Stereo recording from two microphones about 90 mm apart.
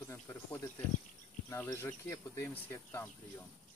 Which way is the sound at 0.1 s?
25° left (ahead or behind).